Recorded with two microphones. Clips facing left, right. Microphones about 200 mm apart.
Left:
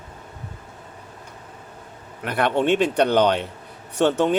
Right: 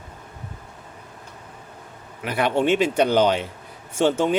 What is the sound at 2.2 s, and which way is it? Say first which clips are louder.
Speech: even; 5° right (ahead or behind).